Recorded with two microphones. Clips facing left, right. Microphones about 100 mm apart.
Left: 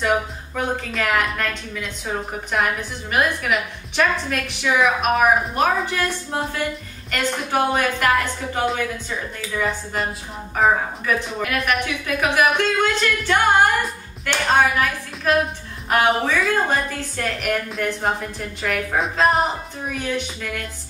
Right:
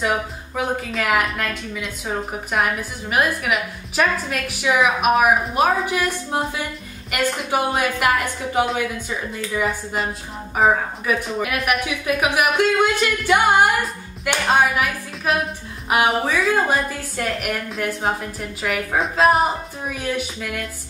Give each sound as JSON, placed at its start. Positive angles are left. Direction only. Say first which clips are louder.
{"t": 0.6, "sound": "a woman's voice", "louder": "right 1 dB", "side_deg": -5}